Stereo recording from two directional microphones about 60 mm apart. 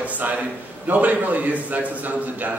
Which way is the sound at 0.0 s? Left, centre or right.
Right.